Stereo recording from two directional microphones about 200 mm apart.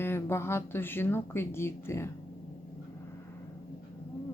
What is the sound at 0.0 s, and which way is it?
Speech, 10° left (ahead or behind).